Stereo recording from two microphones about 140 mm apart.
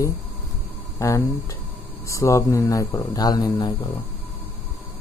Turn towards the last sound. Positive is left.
turn(degrees=30)  # may be behind; listen again after turning